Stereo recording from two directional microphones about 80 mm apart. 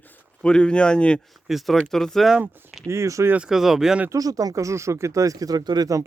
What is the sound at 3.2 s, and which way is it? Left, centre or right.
Speech, centre.